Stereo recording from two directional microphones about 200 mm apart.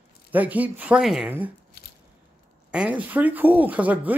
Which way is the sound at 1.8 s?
55° left (ahead or behind).